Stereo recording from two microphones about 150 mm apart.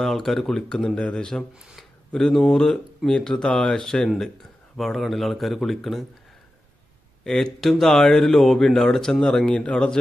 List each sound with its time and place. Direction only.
0.0 s speech: centre (ahead or behind)
7.2 s speech: 5° left (ahead or behind)